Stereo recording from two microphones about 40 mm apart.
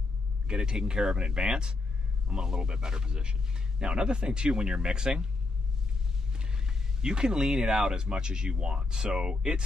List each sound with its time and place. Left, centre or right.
0.5 s speech: centre
6.3 s speech: centre